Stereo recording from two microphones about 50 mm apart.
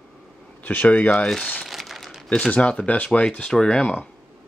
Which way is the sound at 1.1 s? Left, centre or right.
Centre.